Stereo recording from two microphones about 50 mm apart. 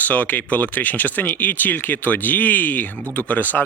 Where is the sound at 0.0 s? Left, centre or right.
Left.